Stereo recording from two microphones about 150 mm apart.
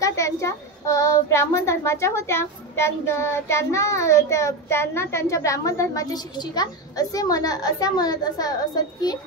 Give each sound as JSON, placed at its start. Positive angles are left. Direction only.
{"t": 0.0, "sound": "a child's voice", "side_deg": 20}